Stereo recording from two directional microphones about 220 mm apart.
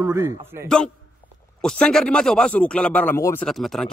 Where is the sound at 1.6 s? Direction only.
5° left (ahead or behind).